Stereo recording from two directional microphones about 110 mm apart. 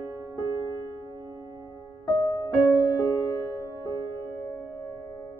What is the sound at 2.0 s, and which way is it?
Music, 35° left (ahead or behind).